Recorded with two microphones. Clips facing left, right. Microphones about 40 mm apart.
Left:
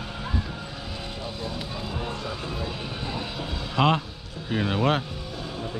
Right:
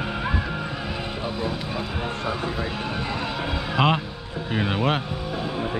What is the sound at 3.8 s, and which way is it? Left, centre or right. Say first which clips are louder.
Speech: right 1 dB; centre.